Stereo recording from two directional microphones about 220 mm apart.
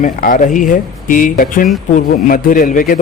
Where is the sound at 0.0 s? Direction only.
35° left (ahead or behind).